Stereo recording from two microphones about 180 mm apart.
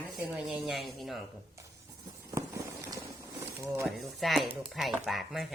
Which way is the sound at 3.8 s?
Centre (ahead or behind).